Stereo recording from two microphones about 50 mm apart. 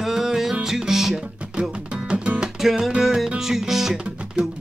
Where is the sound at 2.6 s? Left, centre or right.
Centre.